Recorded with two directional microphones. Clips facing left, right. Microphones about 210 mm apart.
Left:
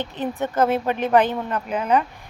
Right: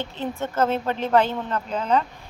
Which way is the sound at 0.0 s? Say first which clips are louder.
Left 3 dB; 15° left (ahead or behind).